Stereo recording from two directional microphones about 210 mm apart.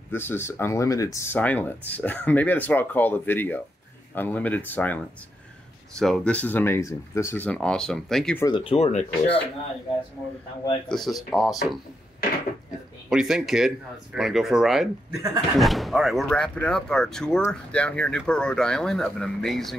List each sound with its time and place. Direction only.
0.1 s speech: 10° left (ahead or behind)
8.5 s speech: 25° left (ahead or behind)
10.9 s speech: centre (ahead or behind)
13.1 s speech: centre (ahead or behind)